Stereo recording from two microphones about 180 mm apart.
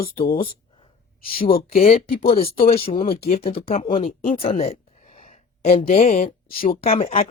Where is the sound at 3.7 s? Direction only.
35° left (ahead or behind).